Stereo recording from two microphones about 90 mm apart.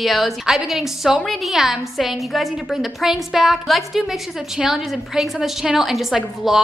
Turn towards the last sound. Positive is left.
turn(degrees=-5)  # may be behind; listen again after turning